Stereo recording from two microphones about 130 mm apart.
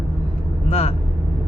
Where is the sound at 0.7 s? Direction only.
50° left (ahead or behind).